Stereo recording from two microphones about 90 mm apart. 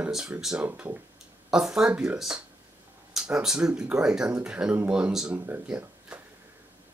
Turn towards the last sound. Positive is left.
turn(degrees=-15)  # may be behind; listen again after turning